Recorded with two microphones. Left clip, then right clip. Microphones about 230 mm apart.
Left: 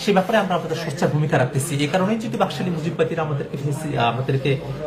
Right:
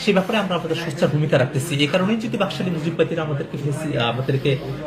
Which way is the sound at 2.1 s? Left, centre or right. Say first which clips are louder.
Left 1 dB; centre.